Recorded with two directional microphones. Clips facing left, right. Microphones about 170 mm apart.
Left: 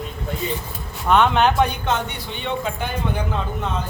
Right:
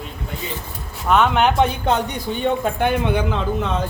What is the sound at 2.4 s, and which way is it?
Speech, 55° right (ahead or behind).